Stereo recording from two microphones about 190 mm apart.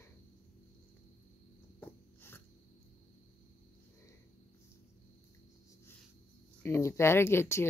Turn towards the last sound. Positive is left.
turn(degrees=15)  # may be behind; listen again after turning